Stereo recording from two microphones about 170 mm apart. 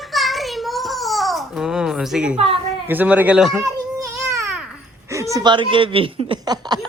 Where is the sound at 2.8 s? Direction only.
10° right (ahead or behind).